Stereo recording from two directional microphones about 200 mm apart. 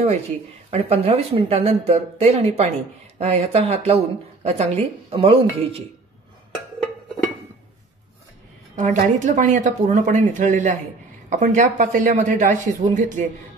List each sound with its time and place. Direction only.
0.7 s speech: 30° right (ahead or behind)
8.7 s speech: 40° right (ahead or behind)